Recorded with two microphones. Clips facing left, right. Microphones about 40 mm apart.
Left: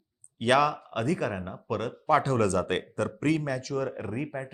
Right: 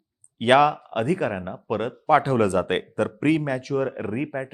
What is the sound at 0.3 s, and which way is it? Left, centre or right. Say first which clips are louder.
Speech: right 6 dB; right.